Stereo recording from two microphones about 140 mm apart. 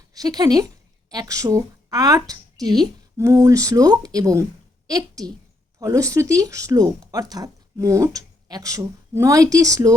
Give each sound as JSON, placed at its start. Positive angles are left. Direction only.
{"t": 0.1, "sound": "a woman's voice", "side_deg": -25}